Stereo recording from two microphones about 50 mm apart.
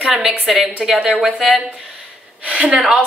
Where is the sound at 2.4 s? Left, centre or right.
Right.